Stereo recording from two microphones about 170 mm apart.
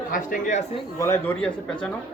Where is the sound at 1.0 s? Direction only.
15° left (ahead or behind).